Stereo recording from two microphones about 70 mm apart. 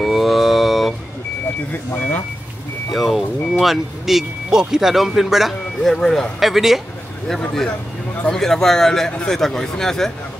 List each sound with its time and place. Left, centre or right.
0.0 s a sound: centre
1.7 s vehicle: left
2.9 s speech: centre
8.3 s a man's voice: centre